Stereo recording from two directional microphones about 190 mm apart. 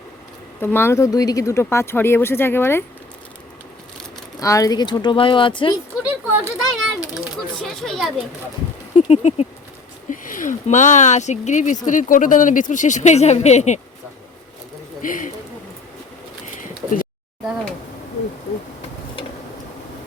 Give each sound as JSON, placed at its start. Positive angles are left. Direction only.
{"t": 0.6, "sound": "speech", "side_deg": 10}
{"t": 4.4, "sound": "speech", "side_deg": 15}
{"t": 6.4, "sound": "children playing", "side_deg": 0}
{"t": 7.6, "sound": "speech", "side_deg": 0}
{"t": 9.0, "sound": "speech", "side_deg": 35}
{"t": 15.0, "sound": "speech", "side_deg": 45}
{"t": 16.6, "sound": "a sound", "side_deg": 45}